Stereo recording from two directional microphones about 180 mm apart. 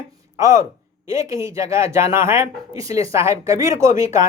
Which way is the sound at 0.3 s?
20° right (ahead or behind).